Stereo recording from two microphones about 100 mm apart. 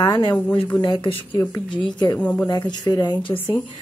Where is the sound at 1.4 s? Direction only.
40° left (ahead or behind).